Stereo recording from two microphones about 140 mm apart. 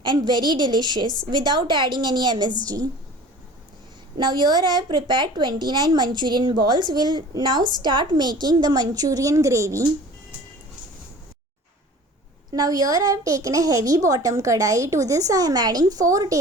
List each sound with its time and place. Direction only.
0.0 s a woman's voice: 30° right (ahead or behind)
1.0 s a woman's voice: 30° left (ahead or behind)
1.3 s a woman's voice: 30° right (ahead or behind)
4.2 s a woman's voice: 30° right (ahead or behind)
12.5 s a child's voice: 25° right (ahead or behind)